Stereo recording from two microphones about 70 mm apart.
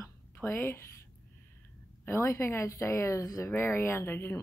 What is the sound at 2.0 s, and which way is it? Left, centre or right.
Speech, left.